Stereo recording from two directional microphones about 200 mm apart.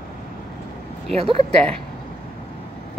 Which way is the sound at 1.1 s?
30° right (ahead or behind).